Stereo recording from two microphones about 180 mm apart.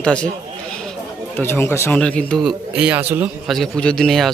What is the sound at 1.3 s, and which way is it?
Speech, 15° left (ahead or behind).